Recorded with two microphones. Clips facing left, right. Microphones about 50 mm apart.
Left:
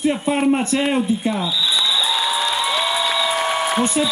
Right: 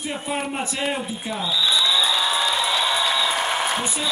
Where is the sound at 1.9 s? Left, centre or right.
Centre.